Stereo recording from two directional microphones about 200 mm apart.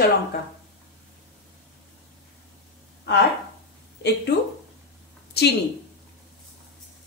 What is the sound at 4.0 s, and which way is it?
Speech, 60° left (ahead or behind).